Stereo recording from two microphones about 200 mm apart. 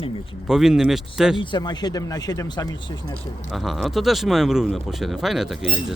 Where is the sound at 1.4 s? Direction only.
25° left (ahead or behind).